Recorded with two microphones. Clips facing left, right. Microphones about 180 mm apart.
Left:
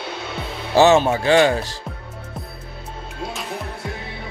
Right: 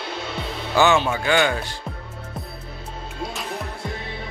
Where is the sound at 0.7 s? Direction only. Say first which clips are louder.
Left 5 dB; 40° left (ahead or behind).